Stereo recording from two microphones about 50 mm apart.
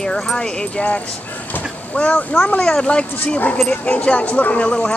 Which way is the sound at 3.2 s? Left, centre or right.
Left.